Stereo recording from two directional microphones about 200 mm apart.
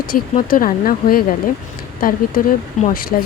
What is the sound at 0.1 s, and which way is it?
Speech, 45° left (ahead or behind).